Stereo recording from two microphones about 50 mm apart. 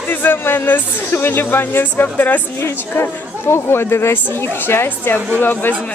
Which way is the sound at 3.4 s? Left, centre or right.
Left.